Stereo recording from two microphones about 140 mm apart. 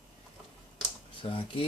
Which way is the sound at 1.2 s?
40° left (ahead or behind).